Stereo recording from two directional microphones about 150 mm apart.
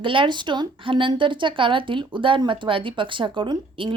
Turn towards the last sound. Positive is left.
turn(degrees=-35)  # may be behind; listen again after turning